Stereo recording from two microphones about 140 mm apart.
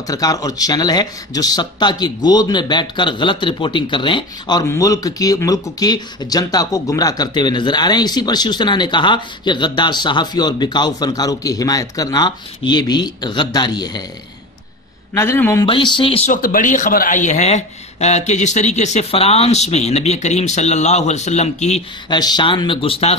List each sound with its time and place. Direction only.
0.0 s speech: 25° left (ahead or behind)
15.1 s speech: 15° left (ahead or behind)
15.6 s speech: 35° left (ahead or behind)
16.3 s speech: 80° left; by 21.8 s 55° left (ahead or behind)
22.1 s speech: 30° left (ahead or behind)